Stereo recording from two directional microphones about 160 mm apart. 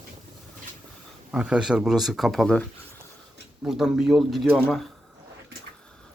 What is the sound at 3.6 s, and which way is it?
Speech, 5° right (ahead or behind).